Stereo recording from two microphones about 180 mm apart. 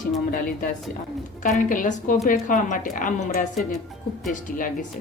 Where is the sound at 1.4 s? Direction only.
45° left (ahead or behind).